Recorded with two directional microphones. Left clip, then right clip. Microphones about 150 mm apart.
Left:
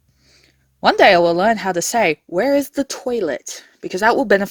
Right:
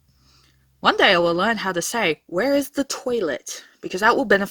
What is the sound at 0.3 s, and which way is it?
A woman's voice, 25° left (ahead or behind).